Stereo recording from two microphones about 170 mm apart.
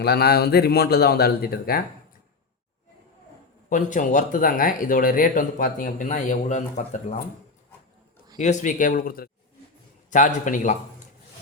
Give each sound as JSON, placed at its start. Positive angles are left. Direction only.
{"t": 0.0, "sound": "speech", "side_deg": 70}
{"t": 3.7, "sound": "speech", "side_deg": 50}
{"t": 8.4, "sound": "speech", "side_deg": 45}